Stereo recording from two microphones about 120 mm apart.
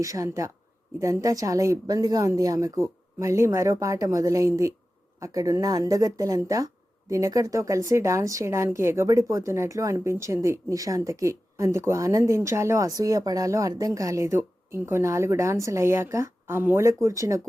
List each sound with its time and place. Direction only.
0.0 s a woman's voice: 25° right (ahead or behind)